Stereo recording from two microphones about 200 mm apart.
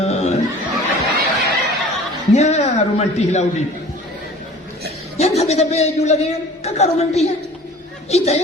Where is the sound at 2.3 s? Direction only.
35° left (ahead or behind).